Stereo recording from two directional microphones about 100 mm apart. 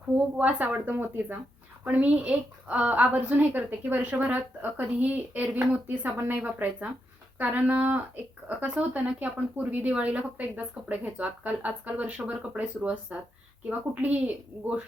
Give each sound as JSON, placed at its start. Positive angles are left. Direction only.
{"t": 0.3, "sound": "a woman's voice", "side_deg": -15}